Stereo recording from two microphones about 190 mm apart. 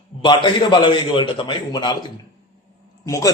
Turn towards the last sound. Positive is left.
turn(degrees=15)  # may be behind; listen again after turning